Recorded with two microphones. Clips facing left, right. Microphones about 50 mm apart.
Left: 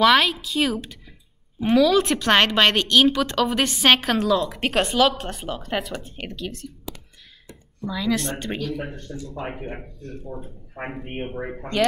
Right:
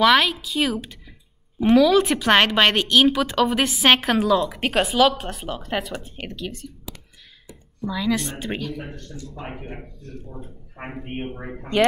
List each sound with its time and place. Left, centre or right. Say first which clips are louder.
0.0 s a woman's voice: even; centre
7.8 s a woman's voice: right 1 dB; centre
10.9 s a woman's voice: right 1 dB; centre
11.2 s speech: left 3 dB; centre